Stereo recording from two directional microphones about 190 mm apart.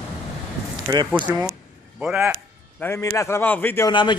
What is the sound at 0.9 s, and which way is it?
A man's voice, 15° right (ahead or behind).